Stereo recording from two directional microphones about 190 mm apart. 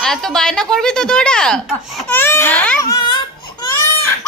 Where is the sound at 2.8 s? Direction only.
20° left (ahead or behind).